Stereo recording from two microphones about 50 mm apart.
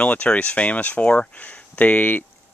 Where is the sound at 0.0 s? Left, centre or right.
Left.